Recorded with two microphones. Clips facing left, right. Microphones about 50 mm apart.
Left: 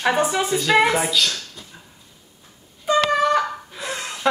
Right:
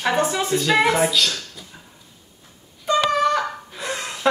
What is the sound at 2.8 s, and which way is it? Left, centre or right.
Wind instrument, centre.